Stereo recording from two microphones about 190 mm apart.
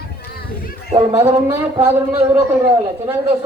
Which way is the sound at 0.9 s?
15° right (ahead or behind).